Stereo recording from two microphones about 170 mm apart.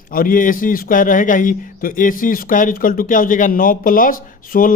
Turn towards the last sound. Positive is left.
turn(degrees=55)  # may be behind; listen again after turning